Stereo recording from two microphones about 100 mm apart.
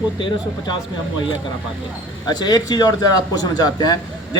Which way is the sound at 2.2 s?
45° left (ahead or behind).